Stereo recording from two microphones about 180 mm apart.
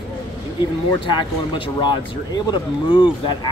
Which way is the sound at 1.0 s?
25° left (ahead or behind).